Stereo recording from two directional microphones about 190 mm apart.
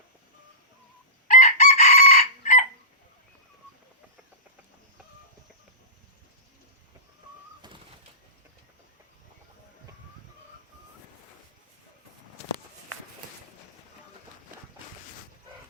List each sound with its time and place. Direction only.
1.3 s chicken: 40° left (ahead or behind)
7.6 s bird: 20° right (ahead or behind)